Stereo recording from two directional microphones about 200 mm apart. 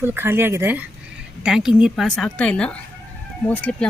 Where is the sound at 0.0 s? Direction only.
10° right (ahead or behind).